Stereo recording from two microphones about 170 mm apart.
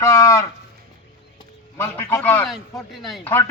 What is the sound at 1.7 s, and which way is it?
Speech, 15° left (ahead or behind).